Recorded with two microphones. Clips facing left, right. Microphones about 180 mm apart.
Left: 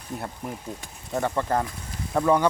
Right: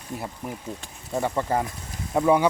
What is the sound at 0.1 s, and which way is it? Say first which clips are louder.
Speech: even; centre (ahead or behind).